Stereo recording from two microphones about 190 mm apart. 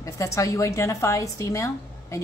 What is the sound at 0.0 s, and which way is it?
A woman's voice, 15° left (ahead or behind).